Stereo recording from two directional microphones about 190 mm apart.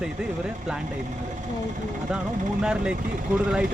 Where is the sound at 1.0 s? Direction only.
40° right (ahead or behind).